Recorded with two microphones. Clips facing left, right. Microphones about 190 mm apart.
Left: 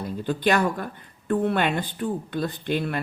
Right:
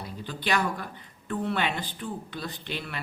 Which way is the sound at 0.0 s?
50° left (ahead or behind).